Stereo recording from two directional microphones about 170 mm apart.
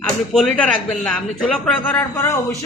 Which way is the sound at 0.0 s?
5° left (ahead or behind).